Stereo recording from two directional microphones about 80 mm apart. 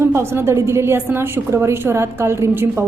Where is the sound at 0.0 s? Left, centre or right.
Right.